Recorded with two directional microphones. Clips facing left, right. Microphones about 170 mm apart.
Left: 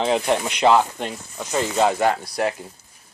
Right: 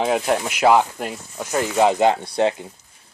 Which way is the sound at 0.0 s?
5° right (ahead or behind).